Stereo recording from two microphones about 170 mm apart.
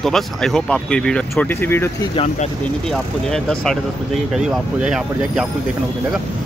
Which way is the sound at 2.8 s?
5° left (ahead or behind).